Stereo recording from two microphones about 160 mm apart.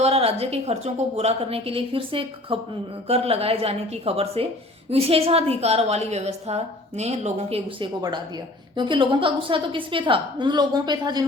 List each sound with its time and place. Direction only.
0.0 s a woman's voice: 40° right (ahead or behind)
7.8 s a woman's voice: 25° right (ahead or behind)